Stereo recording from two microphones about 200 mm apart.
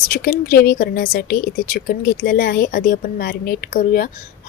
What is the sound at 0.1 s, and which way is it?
Speech, 45° left (ahead or behind).